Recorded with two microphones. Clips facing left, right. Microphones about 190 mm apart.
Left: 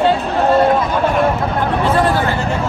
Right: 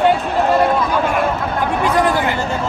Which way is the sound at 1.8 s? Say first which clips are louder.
Even; 15° right (ahead or behind).